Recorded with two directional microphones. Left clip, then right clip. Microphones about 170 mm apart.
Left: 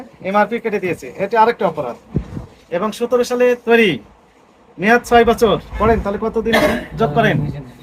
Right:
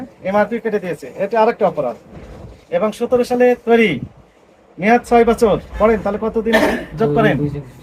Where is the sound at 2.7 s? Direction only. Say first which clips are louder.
Right 1 dB; 30° left (ahead or behind).